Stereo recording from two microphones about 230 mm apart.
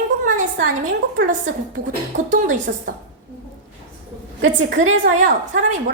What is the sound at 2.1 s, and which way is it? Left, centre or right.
Speech, right.